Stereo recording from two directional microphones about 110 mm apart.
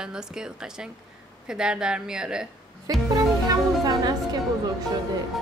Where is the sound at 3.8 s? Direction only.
35° right (ahead or behind).